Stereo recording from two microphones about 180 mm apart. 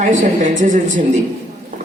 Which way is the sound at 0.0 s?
45° right (ahead or behind).